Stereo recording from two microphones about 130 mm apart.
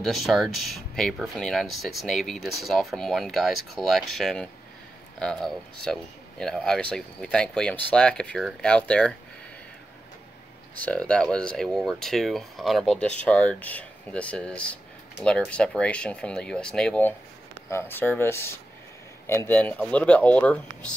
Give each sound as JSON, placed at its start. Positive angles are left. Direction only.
{"t": 0.0, "sound": "speech", "side_deg": 0}
{"t": 10.8, "sound": "speech", "side_deg": 10}